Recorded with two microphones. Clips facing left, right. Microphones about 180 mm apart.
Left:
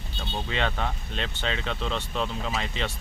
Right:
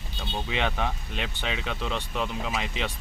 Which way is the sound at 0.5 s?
15° right (ahead or behind).